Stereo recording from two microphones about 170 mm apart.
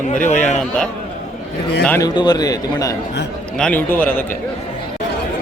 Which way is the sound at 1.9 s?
20° left (ahead or behind).